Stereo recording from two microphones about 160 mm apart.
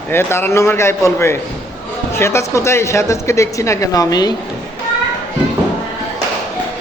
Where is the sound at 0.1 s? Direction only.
15° left (ahead or behind).